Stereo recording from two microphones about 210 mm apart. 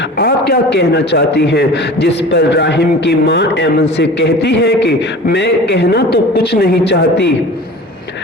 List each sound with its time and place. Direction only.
0.2 s a man's voice: 50° left (ahead or behind)